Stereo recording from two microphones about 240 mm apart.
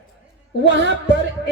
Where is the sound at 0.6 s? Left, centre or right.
Right.